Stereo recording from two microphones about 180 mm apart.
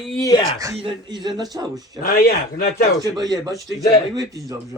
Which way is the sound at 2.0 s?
55° left (ahead or behind).